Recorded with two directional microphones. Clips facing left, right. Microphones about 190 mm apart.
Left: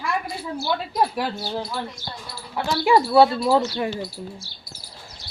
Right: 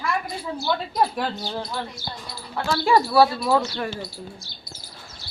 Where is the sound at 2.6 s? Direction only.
20° left (ahead or behind).